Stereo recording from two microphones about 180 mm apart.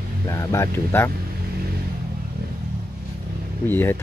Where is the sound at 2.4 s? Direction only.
60° right (ahead or behind).